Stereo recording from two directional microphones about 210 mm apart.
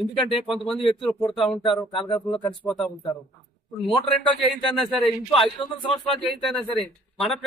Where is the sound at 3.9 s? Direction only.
25° left (ahead or behind).